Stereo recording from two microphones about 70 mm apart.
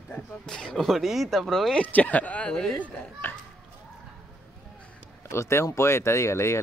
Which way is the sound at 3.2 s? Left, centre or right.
Left.